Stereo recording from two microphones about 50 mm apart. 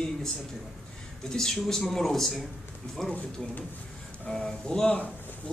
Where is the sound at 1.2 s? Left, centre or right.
Centre.